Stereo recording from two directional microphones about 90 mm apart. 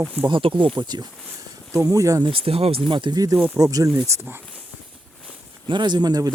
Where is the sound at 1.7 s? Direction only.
35° right (ahead or behind).